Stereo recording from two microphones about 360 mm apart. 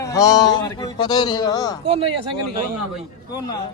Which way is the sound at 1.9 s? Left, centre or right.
Centre.